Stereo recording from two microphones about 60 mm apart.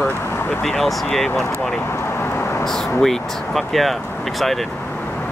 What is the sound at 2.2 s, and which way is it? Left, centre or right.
Vehicle, left.